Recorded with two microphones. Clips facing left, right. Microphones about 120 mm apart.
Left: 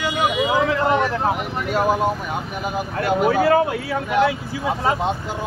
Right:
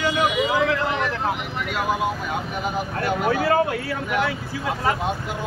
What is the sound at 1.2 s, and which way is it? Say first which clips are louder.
Speech: left 4 dB; 35° left (ahead or behind).